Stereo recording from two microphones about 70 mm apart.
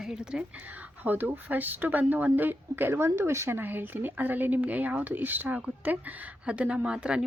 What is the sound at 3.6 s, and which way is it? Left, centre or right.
A woman's voice, right.